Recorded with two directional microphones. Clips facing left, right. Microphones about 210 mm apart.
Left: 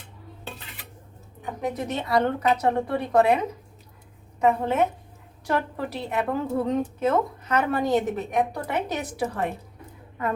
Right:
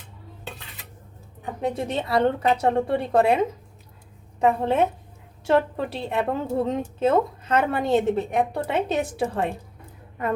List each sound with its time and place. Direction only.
1.6 s a woman's voice: 30° right (ahead or behind)